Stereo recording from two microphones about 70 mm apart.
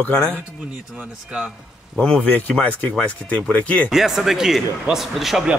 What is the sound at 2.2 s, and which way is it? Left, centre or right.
Speech, left.